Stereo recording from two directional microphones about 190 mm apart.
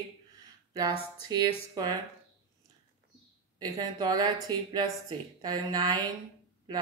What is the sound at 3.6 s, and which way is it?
Speech, 20° right (ahead or behind).